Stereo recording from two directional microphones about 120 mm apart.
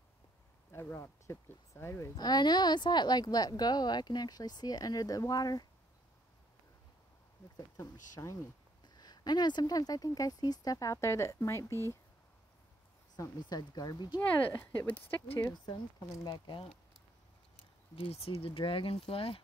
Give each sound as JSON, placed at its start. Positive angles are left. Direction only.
{"t": 0.7, "sound": "speech", "side_deg": 20}
{"t": 2.1, "sound": "a woman's voice", "side_deg": 35}
{"t": 7.5, "sound": "a woman's voice", "side_deg": 25}
{"t": 13.1, "sound": "a woman's voice", "side_deg": 35}
{"t": 14.5, "sound": "speech", "side_deg": 20}
{"t": 15.5, "sound": "a woman's voice", "side_deg": 35}
{"t": 17.9, "sound": "speech", "side_deg": 55}